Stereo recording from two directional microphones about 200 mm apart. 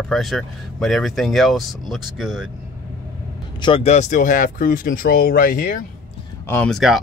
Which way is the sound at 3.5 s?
25° left (ahead or behind).